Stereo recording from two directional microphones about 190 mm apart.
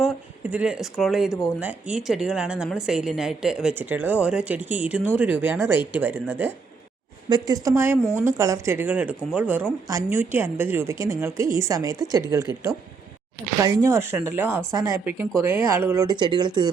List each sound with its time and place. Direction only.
0.5 s a woman's voice: 5° right (ahead or behind)
1.3 s speech: 15° left (ahead or behind)
1.5 s a woman's voice: 5° right (ahead or behind)
13.6 s speech: 15° right (ahead or behind)